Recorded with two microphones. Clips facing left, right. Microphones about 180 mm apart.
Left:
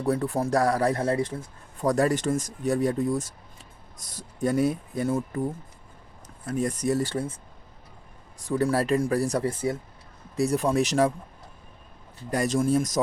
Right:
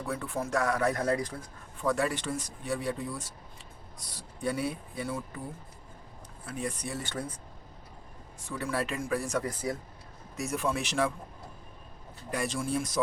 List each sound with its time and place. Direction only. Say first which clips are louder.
0.0 s speech: left 8 dB; 40° left (ahead or behind)
1.8 s speech: left 6 dB; 40° left (ahead or behind)
8.4 s speech: left 9 dB; 40° left (ahead or behind)
12.3 s speech: left 8 dB; 40° left (ahead or behind)